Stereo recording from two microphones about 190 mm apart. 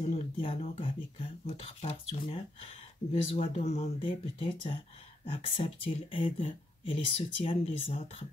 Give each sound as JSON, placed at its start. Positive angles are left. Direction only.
{"t": 0.0, "sound": "speech", "side_deg": 35}